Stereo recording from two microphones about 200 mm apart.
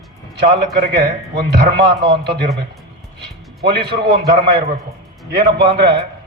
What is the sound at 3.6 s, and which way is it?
Speech, 55° right (ahead or behind).